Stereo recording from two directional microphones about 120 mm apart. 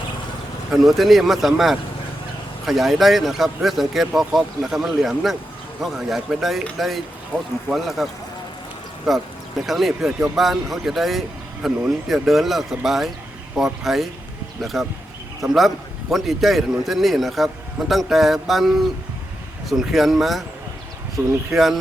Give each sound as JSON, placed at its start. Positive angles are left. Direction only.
{"t": 0.7, "sound": "speech", "side_deg": 0}
{"t": 21.2, "sound": "speech", "side_deg": -25}
{"t": 21.5, "sound": "speech", "side_deg": 0}